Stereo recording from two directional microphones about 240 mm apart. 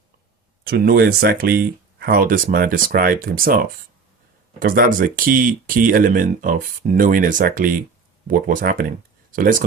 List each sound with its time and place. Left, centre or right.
0.6 s speech: right